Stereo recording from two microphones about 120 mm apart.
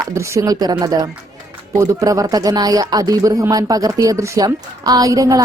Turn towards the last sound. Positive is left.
turn(degrees=-30)  # may be behind; listen again after turning